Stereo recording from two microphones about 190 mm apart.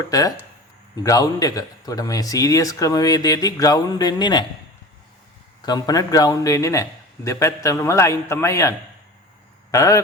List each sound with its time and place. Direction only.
0.1 s speech: 20° left (ahead or behind)
5.6 s a man's voice: 20° left (ahead or behind)
9.7 s a man's voice: 15° left (ahead or behind)